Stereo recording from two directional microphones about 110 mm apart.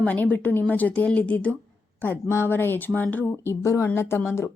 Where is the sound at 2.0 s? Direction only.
20° left (ahead or behind).